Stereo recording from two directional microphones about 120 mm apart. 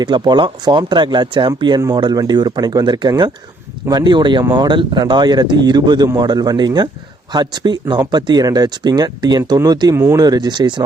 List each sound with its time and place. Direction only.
0.0 s speech: 40° right (ahead or behind)